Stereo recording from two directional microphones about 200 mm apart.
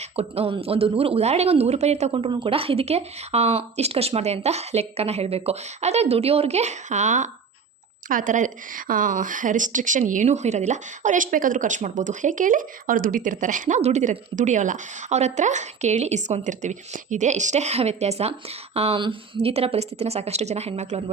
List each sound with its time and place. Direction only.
0.0 s a woman's voice: 30° right (ahead or behind)